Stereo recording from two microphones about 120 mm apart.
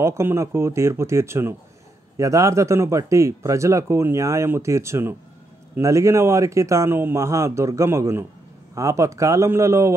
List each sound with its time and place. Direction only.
0.0 s speech: 20° right (ahead or behind)